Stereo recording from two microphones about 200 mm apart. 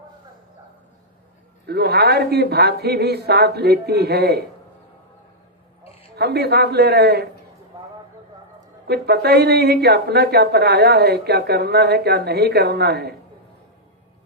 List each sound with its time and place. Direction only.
1.6 s speech: 55° right (ahead or behind)
6.1 s a woman's voice: 55° right (ahead or behind)
8.9 s a woman's voice: 55° right (ahead or behind)